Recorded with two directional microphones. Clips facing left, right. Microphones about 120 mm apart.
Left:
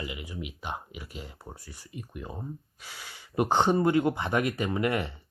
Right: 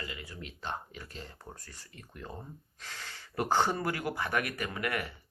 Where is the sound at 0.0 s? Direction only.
15° left (ahead or behind).